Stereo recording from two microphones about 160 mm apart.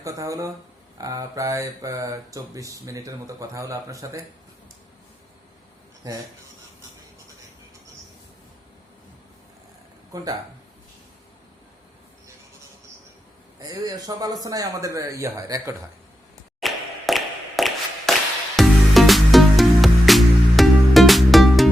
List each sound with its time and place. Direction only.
0.0 s speech: 20° right (ahead or behind)
10.1 s speech: 20° right (ahead or behind)
13.7 s speech: 20° right (ahead or behind)
16.6 s a sound: centre (ahead or behind)
18.5 s music: centre (ahead or behind)